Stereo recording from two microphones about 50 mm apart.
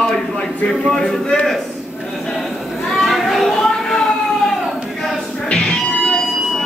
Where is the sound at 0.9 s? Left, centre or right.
Centre.